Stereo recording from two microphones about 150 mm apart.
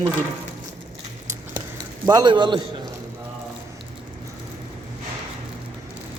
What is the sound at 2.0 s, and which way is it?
Speech, 30° right (ahead or behind).